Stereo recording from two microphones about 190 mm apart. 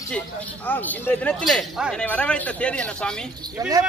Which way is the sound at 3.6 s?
20° right (ahead or behind).